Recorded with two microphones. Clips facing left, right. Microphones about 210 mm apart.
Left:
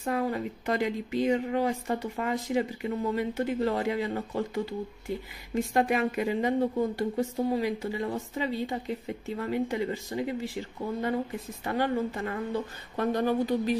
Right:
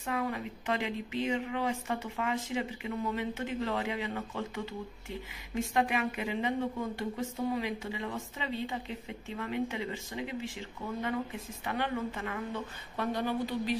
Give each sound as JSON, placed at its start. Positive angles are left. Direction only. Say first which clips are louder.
{"t": 0.0, "sound": "speech", "louder": "left 5 dB", "side_deg": 35}